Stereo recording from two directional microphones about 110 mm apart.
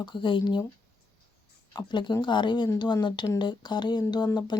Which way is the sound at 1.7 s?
45° left (ahead or behind).